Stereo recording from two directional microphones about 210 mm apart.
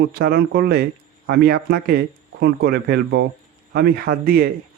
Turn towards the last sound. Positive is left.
turn(degrees=-45)  # may be behind; listen again after turning